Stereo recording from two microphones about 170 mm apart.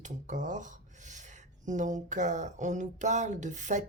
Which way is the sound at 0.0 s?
45° right (ahead or behind).